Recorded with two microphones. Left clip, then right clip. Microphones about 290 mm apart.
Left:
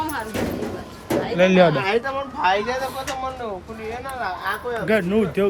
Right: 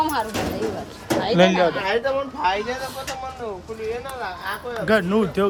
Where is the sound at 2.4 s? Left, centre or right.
Left.